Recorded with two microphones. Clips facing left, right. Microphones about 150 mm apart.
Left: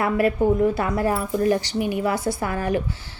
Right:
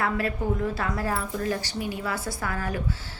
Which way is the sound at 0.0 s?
20° left (ahead or behind).